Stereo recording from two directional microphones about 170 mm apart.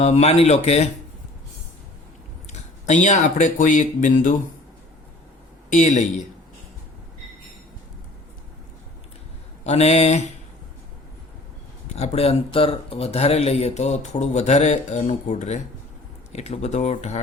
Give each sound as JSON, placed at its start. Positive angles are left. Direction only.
{"t": 0.0, "sound": "speech", "side_deg": 40}
{"t": 2.5, "sound": "speech", "side_deg": 45}
{"t": 5.7, "sound": "speech", "side_deg": 45}
{"t": 9.6, "sound": "speech", "side_deg": 40}
{"t": 11.9, "sound": "speech", "side_deg": 40}